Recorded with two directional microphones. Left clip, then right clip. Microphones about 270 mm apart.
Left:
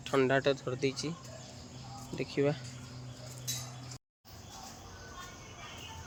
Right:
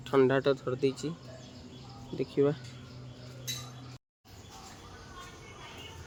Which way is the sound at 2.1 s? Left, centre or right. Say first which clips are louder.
Right 3 dB; centre.